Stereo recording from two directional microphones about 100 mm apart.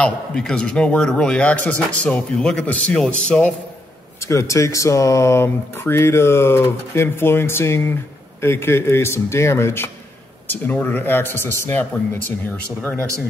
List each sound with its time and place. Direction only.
0.0 s speech: 10° left (ahead or behind)
4.3 s speech: 30° left (ahead or behind)